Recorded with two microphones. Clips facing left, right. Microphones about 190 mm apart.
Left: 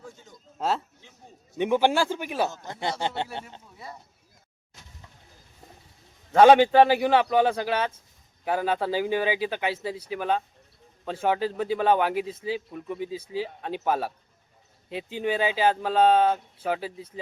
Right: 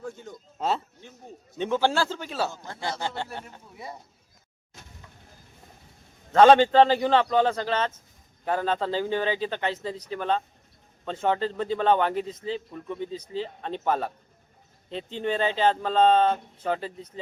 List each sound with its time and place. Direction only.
0.0 s a sound: 55° right (ahead or behind)
1.5 s a man's voice: 15° left (ahead or behind)
6.3 s a man's voice: 10° left (ahead or behind)